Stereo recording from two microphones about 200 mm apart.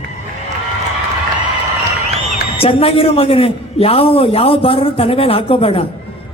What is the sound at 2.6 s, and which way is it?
A man's voice, 30° left (ahead or behind).